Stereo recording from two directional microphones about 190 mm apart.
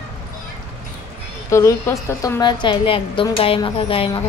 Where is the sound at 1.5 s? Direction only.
15° left (ahead or behind).